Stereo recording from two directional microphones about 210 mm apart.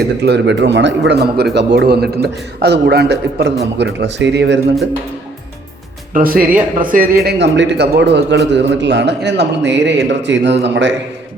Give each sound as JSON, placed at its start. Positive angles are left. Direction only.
{"t": 0.3, "sound": "a man's voice", "side_deg": -55}
{"t": 6.1, "sound": "a man's voice", "side_deg": -45}